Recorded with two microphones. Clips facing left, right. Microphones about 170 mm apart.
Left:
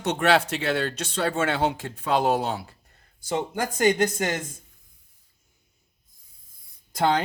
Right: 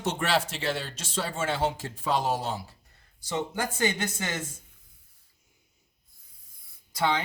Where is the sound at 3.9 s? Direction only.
40° left (ahead or behind).